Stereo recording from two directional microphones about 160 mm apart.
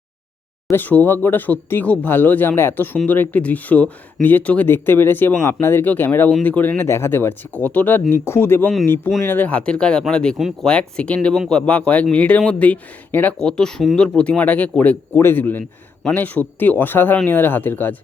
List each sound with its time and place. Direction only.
0.7 s speech: 10° left (ahead or behind)